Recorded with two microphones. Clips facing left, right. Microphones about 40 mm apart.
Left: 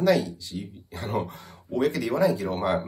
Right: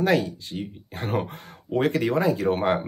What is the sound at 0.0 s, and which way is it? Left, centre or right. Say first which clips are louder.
Speech: even; right.